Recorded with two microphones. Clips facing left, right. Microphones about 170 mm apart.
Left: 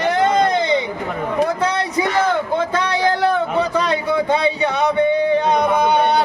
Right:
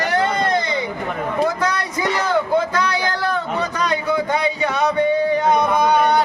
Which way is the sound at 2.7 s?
25° left (ahead or behind).